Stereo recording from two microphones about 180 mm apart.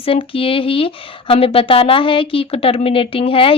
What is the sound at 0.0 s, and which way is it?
Speech, 30° left (ahead or behind).